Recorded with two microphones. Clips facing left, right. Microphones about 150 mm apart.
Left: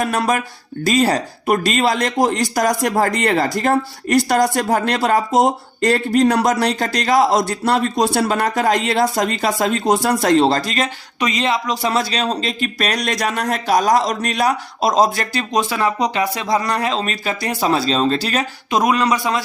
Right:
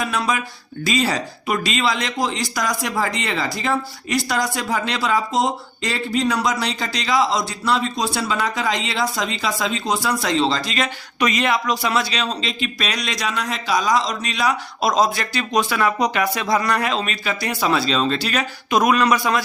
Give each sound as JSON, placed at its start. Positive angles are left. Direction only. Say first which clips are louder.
{"t": 0.0, "sound": "speech", "louder": "left 4 dB", "side_deg": 45}
{"t": 11.2, "sound": "speech", "louder": "even", "side_deg": 25}
{"t": 11.9, "sound": "speech", "louder": "left 6 dB", "side_deg": 40}
{"t": 15.5, "sound": "speech", "louder": "left 1 dB", "side_deg": 30}
{"t": 18.8, "sound": "speech", "louder": "even", "side_deg": 25}